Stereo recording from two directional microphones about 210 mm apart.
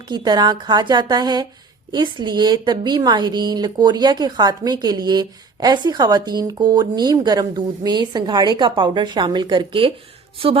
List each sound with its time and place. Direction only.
0.1 s a woman's voice: 20° right (ahead or behind)